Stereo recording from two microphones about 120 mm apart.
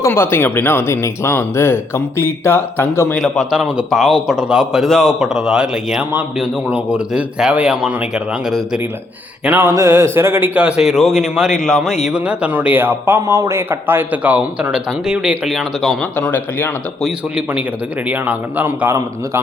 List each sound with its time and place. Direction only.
0.0 s speech: 20° left (ahead or behind)
3.2 s a man's voice: centre (ahead or behind)
16.1 s speech: 15° left (ahead or behind)
17.0 s a man's voice: 10° right (ahead or behind)